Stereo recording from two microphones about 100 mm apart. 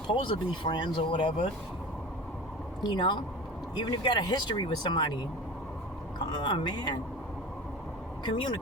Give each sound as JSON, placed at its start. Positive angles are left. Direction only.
{"t": 0.1, "sound": "speech", "side_deg": 55}
{"t": 2.8, "sound": "speech", "side_deg": 50}
{"t": 6.1, "sound": "speech", "side_deg": 50}
{"t": 8.2, "sound": "speech", "side_deg": 50}